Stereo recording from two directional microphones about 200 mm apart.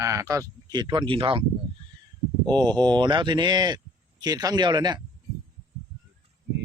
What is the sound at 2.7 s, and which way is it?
Speech, 20° right (ahead or behind).